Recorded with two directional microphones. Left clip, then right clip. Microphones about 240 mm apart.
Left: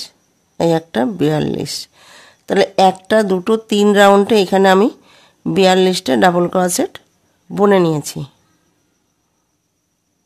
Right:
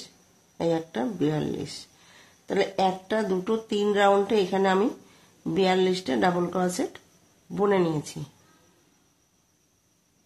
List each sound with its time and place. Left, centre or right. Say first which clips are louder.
0.6 s speech: left 11 dB; left